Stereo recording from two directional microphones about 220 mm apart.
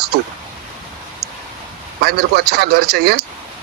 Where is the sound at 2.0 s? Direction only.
45° right (ahead or behind).